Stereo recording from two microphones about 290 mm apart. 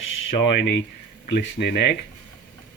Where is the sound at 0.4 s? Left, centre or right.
Left.